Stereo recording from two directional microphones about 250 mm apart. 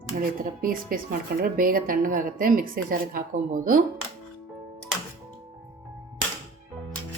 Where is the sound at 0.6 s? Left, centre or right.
Right.